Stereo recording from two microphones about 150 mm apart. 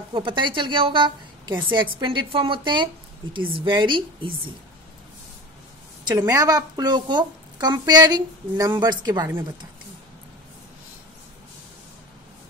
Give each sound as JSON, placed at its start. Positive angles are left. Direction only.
{"t": 0.1, "sound": "a woman's voice", "side_deg": -35}
{"t": 6.0, "sound": "a woman's voice", "side_deg": -25}